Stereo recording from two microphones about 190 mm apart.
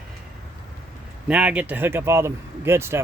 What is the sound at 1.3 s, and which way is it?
Speech, 5° right (ahead or behind).